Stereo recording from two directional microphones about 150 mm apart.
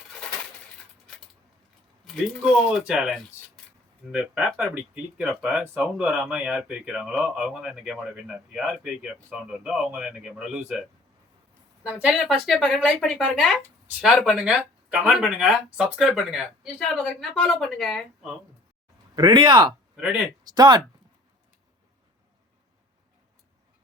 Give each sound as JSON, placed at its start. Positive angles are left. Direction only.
{"t": 2.0, "sound": "speech", "side_deg": 0}
{"t": 19.1, "sound": "speech", "side_deg": -30}